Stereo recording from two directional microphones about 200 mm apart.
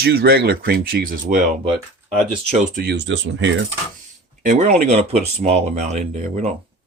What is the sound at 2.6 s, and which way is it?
Speech, 40° right (ahead or behind).